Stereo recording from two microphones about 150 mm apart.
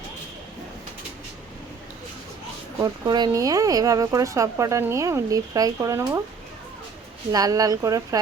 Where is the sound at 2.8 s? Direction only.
25° right (ahead or behind).